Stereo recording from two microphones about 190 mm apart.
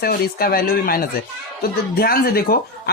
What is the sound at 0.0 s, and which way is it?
Speech, 55° left (ahead or behind).